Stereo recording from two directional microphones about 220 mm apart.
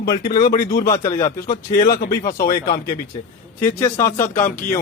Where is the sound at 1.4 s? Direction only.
35° left (ahead or behind).